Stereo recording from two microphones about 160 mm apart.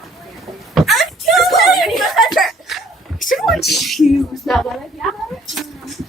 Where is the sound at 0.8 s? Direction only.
Centre (ahead or behind).